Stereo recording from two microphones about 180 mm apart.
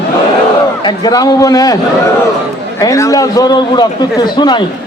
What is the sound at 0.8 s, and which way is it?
Speech, 20° left (ahead or behind).